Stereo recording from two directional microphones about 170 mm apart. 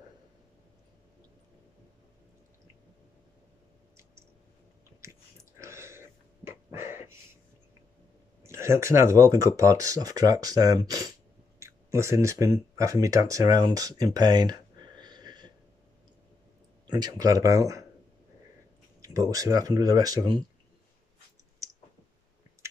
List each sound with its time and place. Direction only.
5.0 s dog: 15° right (ahead or behind)
8.4 s speech: 15° right (ahead or behind)
16.8 s speech: 25° right (ahead or behind)
18.9 s speech: 20° right (ahead or behind)
21.6 s clicking: 20° right (ahead or behind)